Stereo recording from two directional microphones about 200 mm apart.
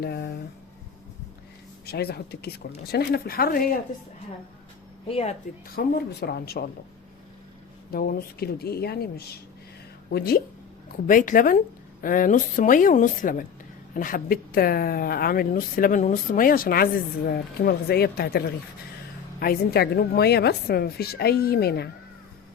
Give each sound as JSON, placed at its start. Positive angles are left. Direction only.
{"t": 0.0, "sound": "speech", "side_deg": 50}
{"t": 1.9, "sound": "speech", "side_deg": 50}
{"t": 5.7, "sound": "speech", "side_deg": 50}
{"t": 7.9, "sound": "speech", "side_deg": 50}